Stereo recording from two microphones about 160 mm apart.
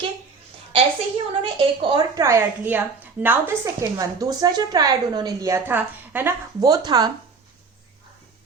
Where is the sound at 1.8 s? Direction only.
25° right (ahead or behind); by 3.6 s 10° right (ahead or behind).